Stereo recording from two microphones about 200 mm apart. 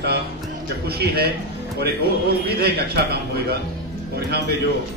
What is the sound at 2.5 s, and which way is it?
A man's voice, 55° right (ahead or behind).